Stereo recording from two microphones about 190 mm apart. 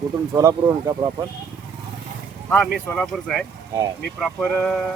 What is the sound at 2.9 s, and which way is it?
Speech, centre (ahead or behind).